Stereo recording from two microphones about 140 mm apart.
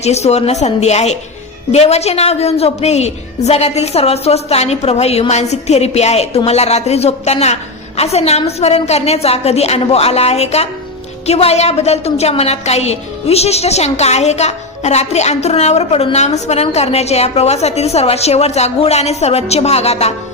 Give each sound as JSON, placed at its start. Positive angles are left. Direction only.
{"t": 0.0, "sound": "a woman's voice", "side_deg": 50}